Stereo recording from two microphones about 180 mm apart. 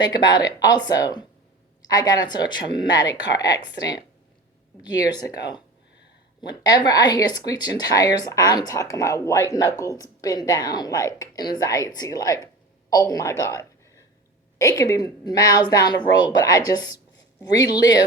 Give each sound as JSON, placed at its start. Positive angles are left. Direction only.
{"t": 0.0, "sound": "speech", "side_deg": 25}
{"t": 14.6, "sound": "speech", "side_deg": 20}